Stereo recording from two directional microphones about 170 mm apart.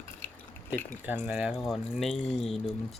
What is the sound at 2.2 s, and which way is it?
Speech, 35° left (ahead or behind).